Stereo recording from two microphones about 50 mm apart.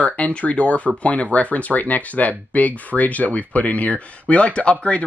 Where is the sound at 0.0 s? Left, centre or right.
Left.